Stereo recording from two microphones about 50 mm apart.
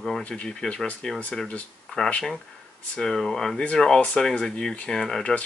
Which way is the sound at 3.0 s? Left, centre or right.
Centre.